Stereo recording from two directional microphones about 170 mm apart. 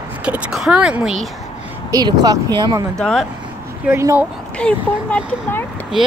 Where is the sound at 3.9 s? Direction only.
15° right (ahead or behind).